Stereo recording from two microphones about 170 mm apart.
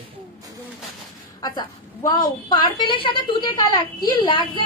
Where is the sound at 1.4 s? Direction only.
25° left (ahead or behind).